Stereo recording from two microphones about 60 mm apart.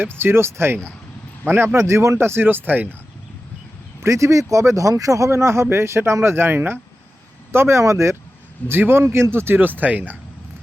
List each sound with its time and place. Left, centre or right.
0.0 s speech: right
4.0 s speech: right
7.5 s speech: right
8.6 s speech: right